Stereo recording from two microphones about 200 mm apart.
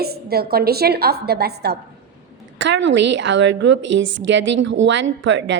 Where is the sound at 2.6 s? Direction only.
65° right (ahead or behind).